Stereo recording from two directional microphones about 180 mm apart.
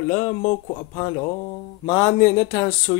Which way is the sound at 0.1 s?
35° left (ahead or behind).